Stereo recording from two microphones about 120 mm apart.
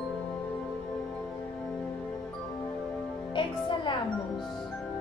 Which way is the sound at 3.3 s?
40° left (ahead or behind).